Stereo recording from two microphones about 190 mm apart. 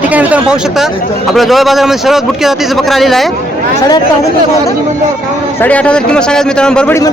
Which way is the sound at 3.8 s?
20° left (ahead or behind).